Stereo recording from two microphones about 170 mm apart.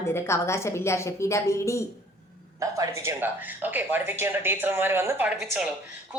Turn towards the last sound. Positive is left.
turn(degrees=-10)  # may be behind; listen again after turning